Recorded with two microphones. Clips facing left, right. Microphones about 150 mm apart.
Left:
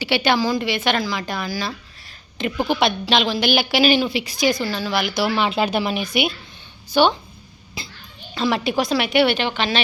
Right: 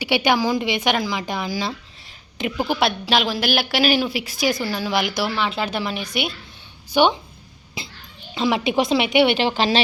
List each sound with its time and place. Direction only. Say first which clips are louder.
0.0 s a woman's voice: even; 15° right (ahead or behind)
2.4 s a woman's voice: left 1 dB; 5° right (ahead or behind)
5.4 s speech: left 4 dB; 15° left (ahead or behind)
6.9 s a woman's voice: even; 15° right (ahead or behind)
8.4 s a woman's voice: right 1 dB; 15° right (ahead or behind)
9.4 s speech: right 3 dB; 35° right (ahead or behind)